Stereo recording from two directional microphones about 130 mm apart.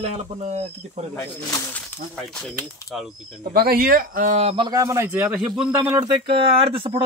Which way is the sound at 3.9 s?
90° right.